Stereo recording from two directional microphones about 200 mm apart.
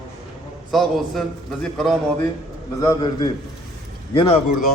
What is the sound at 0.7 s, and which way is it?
Speech, centre (ahead or behind).